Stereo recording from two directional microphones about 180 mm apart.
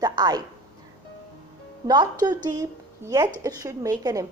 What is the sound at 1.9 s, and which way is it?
A woman's voice, 25° right (ahead or behind).